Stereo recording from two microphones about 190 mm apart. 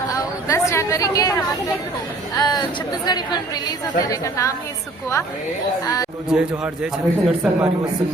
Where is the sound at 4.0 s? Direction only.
15° left (ahead or behind).